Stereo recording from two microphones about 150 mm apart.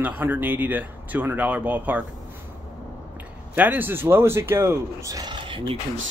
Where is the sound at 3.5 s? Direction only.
10° right (ahead or behind); by 5.8 s 30° right (ahead or behind).